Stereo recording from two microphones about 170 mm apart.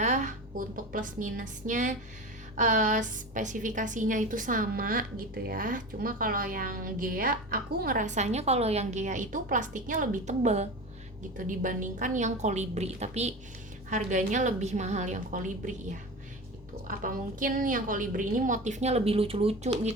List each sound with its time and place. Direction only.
0.0 s a woman's voice: 45° right (ahead or behind)
16.8 s a woman's voice: 55° right (ahead or behind); by 19.9 s 40° right (ahead or behind)